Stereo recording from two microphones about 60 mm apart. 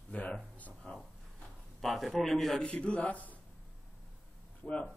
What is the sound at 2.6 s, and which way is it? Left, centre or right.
Speech, centre.